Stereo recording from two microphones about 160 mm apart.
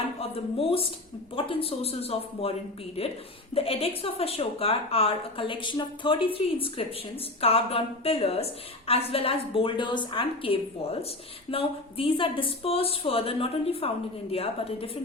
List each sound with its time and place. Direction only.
0.2 s speech: 35° left (ahead or behind)